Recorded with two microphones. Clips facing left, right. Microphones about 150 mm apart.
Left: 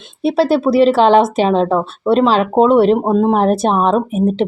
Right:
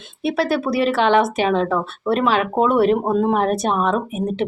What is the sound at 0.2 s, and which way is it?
A woman's voice, 30° left (ahead or behind).